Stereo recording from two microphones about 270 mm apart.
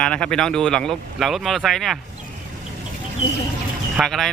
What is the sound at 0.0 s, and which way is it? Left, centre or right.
Speech, centre.